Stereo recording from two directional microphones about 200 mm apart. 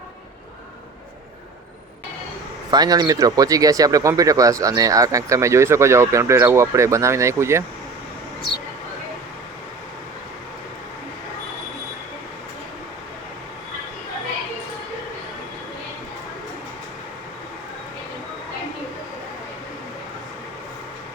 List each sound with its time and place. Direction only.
2.6 s speech: 20° right (ahead or behind)